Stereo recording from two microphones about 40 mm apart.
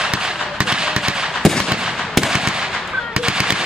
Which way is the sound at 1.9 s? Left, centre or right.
Centre.